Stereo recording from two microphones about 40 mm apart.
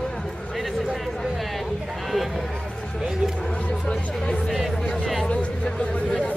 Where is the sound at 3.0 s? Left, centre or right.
Centre.